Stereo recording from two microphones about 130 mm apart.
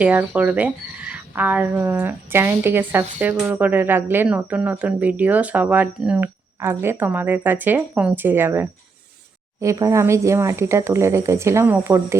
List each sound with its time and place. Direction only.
0.0 s speech: 10° right (ahead or behind)